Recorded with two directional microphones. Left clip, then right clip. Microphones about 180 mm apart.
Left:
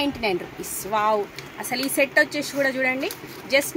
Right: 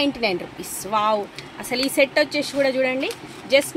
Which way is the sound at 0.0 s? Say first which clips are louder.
Right 2 dB; 65° right (ahead or behind).